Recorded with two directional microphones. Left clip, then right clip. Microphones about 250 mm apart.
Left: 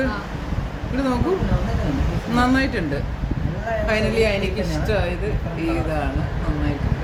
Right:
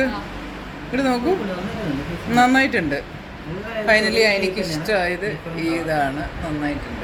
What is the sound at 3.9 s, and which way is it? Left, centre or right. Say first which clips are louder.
Speech: right 5 dB; centre.